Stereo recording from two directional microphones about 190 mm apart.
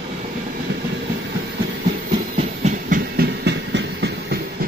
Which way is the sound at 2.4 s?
40° right (ahead or behind).